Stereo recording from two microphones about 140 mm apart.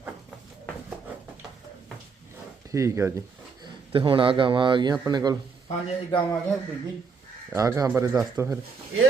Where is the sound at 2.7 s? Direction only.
20° right (ahead or behind).